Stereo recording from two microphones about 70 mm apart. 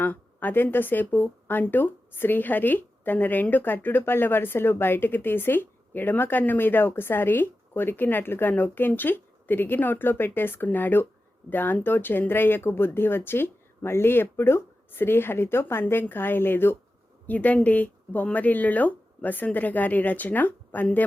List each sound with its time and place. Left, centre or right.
0.0 s speech: left